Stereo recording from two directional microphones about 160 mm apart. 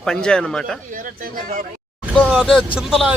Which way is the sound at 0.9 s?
60° right (ahead or behind).